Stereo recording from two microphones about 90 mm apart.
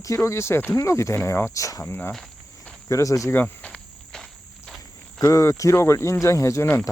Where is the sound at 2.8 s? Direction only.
35° left (ahead or behind).